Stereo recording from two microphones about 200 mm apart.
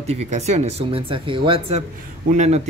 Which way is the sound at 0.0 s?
30° right (ahead or behind).